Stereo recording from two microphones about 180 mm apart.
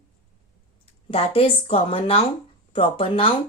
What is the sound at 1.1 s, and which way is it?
A woman's voice, 30° left (ahead or behind).